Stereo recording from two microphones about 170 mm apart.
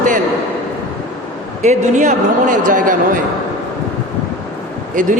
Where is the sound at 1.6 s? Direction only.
45° right (ahead or behind).